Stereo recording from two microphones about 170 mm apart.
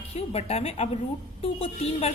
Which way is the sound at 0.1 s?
35° left (ahead or behind).